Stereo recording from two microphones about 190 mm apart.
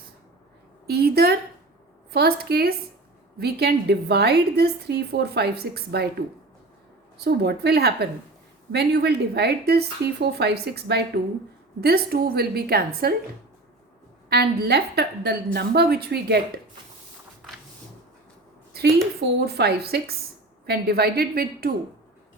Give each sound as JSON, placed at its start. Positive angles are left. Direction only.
{"t": 0.9, "sound": "a woman's voice", "side_deg": -55}
{"t": 7.2, "sound": "a woman's voice", "side_deg": -60}
{"t": 14.3, "sound": "a woman's voice", "side_deg": -55}
{"t": 18.7, "sound": "a sound", "side_deg": -55}
{"t": 19.5, "sound": "a woman's voice", "side_deg": -55}